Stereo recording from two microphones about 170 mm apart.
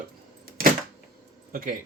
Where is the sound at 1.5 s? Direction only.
55° right (ahead or behind).